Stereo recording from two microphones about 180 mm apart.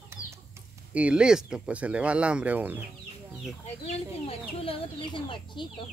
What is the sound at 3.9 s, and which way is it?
Speech, 30° left (ahead or behind).